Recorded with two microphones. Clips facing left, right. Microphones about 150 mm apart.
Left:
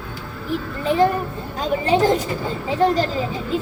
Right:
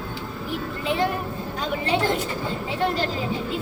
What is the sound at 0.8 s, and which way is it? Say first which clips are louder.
A child's voice: left 7 dB; 40° left (ahead or behind).